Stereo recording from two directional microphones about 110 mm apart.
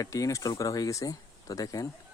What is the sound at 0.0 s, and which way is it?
Speech, 30° left (ahead or behind).